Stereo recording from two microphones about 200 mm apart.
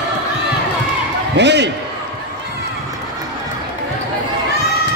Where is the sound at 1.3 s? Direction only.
60° right (ahead or behind).